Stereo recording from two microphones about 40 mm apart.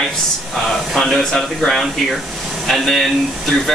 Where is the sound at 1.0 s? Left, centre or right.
Centre.